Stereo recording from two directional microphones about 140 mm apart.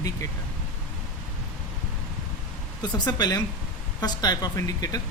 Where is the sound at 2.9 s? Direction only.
30° left (ahead or behind).